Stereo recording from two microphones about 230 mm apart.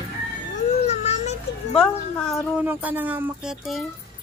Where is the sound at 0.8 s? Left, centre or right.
Left.